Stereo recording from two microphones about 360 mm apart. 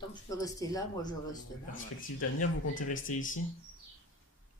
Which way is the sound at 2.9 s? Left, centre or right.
Left.